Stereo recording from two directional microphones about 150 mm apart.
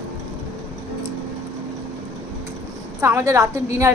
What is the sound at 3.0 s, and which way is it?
Speech, 20° right (ahead or behind).